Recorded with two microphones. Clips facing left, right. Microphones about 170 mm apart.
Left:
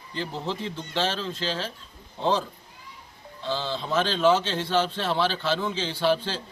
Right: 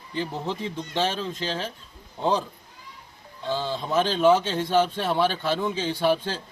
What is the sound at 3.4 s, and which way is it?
Speech, 15° right (ahead or behind).